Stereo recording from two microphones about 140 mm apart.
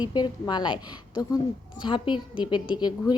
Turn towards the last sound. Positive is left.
turn(degrees=30)  # may be behind; listen again after turning